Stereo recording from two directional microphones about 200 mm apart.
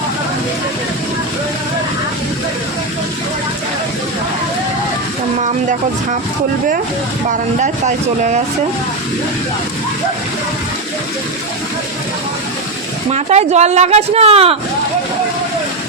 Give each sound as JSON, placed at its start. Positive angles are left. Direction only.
{"t": 7.6, "sound": "speech", "side_deg": -35}
{"t": 13.1, "sound": "speech", "side_deg": -35}